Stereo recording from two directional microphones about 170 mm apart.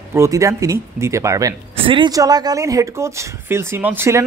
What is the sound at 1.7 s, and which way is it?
Speech, 30° right (ahead or behind).